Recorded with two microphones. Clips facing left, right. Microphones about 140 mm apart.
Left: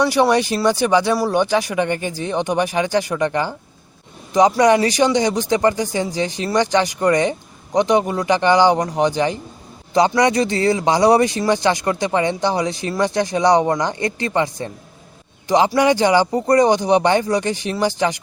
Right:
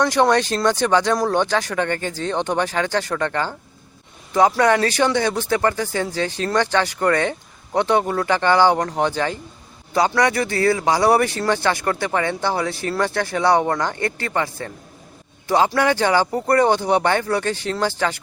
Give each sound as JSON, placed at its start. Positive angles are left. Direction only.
{"t": 0.0, "sound": "speech", "side_deg": 10}